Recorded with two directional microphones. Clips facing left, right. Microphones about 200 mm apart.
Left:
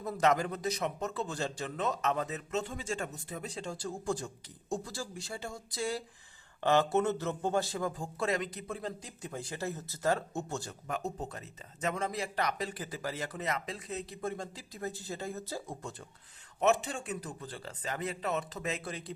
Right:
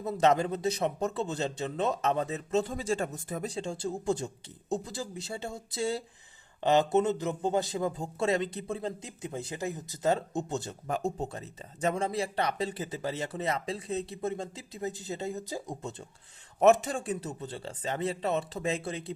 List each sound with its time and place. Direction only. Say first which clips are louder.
0.0 s a man's voice: right 3 dB; 25° right (ahead or behind); by 3.5 s 45° right (ahead or behind)
3.5 s a man's voice: right 5 dB; 25° right (ahead or behind)
16.6 s a man's voice: right 6 dB; 45° right (ahead or behind); by 19.1 s 25° right (ahead or behind)